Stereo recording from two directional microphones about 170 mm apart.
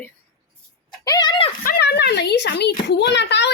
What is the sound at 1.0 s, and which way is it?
Speech, 25° left (ahead or behind).